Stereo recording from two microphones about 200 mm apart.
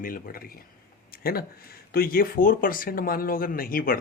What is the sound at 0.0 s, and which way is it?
Speech, 45° left (ahead or behind).